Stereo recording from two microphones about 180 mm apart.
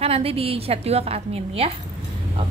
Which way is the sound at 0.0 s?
35° right (ahead or behind).